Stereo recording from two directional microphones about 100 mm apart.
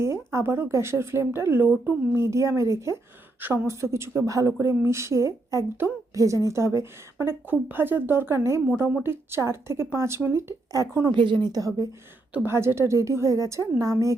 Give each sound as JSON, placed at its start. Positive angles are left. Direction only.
{"t": 0.0, "sound": "a woman's voice", "side_deg": -30}
{"t": 11.1, "sound": "speech", "side_deg": -55}
{"t": 12.3, "sound": "a woman's voice", "side_deg": -20}